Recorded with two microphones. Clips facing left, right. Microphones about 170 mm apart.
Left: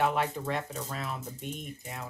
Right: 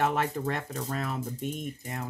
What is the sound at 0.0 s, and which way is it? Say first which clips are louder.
Speech: right 1 dB; 45° right (ahead or behind).